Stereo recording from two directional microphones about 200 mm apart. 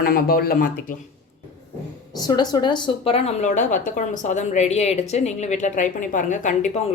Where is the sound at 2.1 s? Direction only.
20° left (ahead or behind).